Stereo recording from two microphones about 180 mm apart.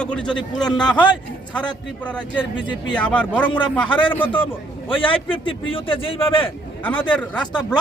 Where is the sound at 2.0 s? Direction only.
10° left (ahead or behind).